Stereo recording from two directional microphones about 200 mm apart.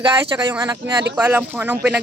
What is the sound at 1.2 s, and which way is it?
Speech, 10° right (ahead or behind).